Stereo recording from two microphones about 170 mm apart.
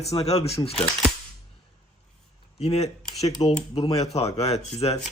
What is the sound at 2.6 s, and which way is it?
A man's voice, 40° left (ahead or behind).